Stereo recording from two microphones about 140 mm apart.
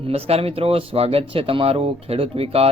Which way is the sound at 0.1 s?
45° right (ahead or behind).